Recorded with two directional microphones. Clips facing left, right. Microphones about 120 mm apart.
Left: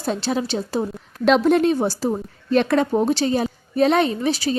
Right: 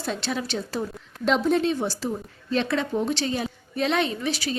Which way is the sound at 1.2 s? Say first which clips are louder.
Left 6 dB; 70° left (ahead or behind).